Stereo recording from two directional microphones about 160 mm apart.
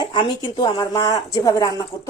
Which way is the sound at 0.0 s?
30° left (ahead or behind).